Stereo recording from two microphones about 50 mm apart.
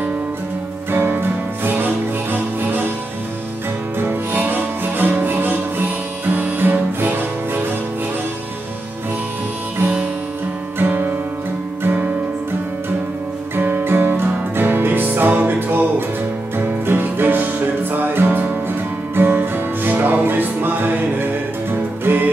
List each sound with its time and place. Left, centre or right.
0.9 s music: right
4.0 s music: right
10.8 s music: right
13.6 s music: right